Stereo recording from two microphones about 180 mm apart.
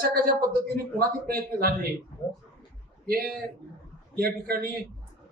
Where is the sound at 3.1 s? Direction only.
55° right (ahead or behind).